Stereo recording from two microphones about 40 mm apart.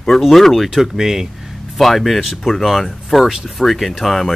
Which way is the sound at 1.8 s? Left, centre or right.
Centre.